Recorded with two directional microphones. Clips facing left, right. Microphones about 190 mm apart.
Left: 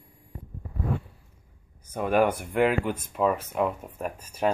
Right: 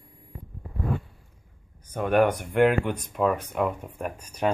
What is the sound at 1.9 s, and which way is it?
Speech, 5° left (ahead or behind).